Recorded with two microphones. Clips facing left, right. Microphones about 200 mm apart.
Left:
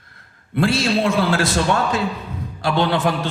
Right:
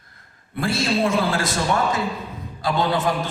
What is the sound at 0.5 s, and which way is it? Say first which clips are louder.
A man's voice: left 4 dB; 85° left.